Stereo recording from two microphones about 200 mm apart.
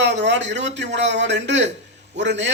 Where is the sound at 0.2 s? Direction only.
60° right (ahead or behind).